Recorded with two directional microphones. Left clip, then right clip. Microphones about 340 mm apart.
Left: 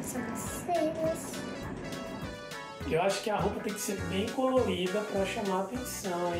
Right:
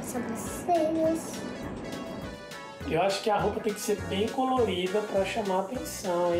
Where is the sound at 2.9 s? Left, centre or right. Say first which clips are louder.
Right 3 dB; right.